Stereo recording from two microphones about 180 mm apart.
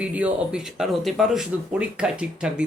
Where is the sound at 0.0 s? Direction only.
5° right (ahead or behind).